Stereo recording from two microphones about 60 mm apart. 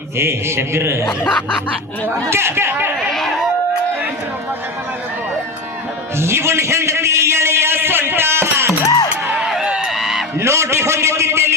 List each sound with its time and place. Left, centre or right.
0.2 s a man's voice: right
1.3 s music: left
2.3 s a man's voice: right
3.1 s speech: centre
6.1 s a man's voice: right
8.8 s music: left
9.6 s a sound: centre
9.9 s music: centre
10.3 s a sound: right